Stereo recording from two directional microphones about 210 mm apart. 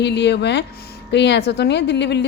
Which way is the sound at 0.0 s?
55° left (ahead or behind).